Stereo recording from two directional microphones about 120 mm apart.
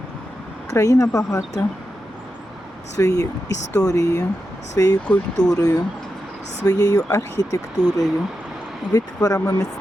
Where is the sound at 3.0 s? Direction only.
30° left (ahead or behind).